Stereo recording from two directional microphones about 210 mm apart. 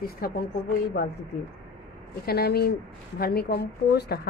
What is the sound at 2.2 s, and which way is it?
A woman's voice, 50° left (ahead or behind).